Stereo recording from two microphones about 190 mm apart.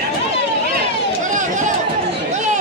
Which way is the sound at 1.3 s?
40° right (ahead or behind).